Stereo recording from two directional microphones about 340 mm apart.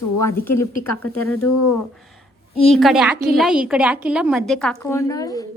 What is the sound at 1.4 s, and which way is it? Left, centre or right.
Speech, left.